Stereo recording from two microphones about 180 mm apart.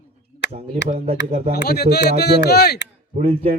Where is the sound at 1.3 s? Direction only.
35° right (ahead or behind).